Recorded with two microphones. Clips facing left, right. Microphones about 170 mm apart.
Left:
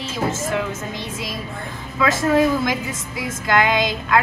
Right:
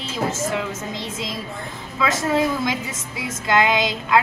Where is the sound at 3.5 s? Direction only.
20° right (ahead or behind).